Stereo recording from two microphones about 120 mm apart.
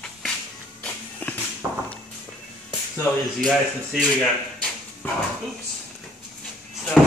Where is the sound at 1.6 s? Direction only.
30° right (ahead or behind).